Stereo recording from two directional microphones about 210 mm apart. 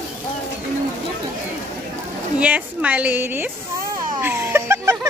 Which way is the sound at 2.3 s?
5° right (ahead or behind).